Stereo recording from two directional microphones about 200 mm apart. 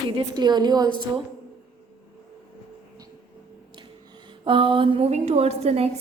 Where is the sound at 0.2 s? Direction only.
20° right (ahead or behind).